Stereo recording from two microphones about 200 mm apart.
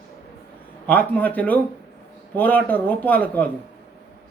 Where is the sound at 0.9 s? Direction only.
10° left (ahead or behind).